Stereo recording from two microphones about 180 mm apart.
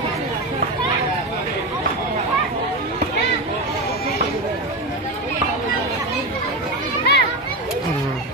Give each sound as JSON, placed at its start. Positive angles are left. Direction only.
{"t": 7.1, "sound": "children playing", "side_deg": 65}